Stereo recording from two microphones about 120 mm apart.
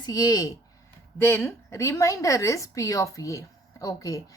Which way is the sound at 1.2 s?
20° left (ahead or behind).